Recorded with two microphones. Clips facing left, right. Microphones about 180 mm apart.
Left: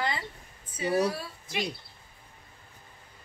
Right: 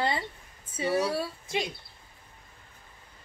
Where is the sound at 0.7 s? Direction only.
25° right (ahead or behind).